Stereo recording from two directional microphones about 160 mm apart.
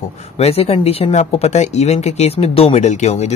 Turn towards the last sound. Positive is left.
turn(degrees=45)  # may be behind; listen again after turning